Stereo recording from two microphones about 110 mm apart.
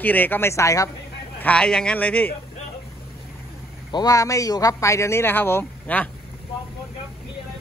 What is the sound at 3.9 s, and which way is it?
Speech, 35° left (ahead or behind).